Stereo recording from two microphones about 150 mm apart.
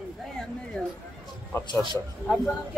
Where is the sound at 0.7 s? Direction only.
5° left (ahead or behind).